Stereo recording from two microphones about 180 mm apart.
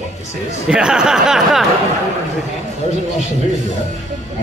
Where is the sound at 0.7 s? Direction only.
5° right (ahead or behind).